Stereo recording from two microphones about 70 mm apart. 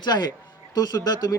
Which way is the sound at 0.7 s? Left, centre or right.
Left.